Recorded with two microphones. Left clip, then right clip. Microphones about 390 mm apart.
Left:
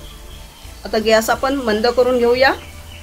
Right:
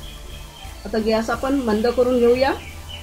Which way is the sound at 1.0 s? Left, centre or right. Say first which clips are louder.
Left 7 dB; left.